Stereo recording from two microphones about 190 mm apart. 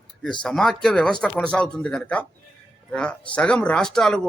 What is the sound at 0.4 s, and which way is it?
A man's voice, centre (ahead or behind).